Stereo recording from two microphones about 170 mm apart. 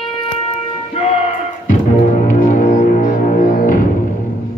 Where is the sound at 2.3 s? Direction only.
50° left (ahead or behind).